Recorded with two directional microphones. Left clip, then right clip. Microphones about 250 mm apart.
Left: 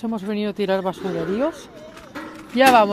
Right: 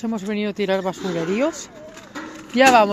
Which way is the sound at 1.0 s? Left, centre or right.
Right.